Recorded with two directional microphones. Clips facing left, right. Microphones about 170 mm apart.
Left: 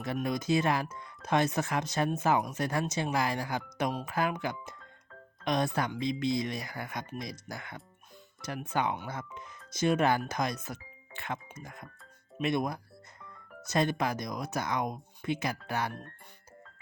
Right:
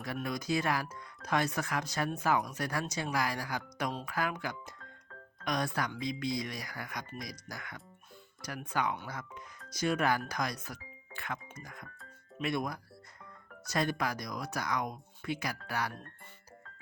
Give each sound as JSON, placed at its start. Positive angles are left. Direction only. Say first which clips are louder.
{"t": 0.0, "sound": "speech", "louder": "left 5 dB", "side_deg": 25}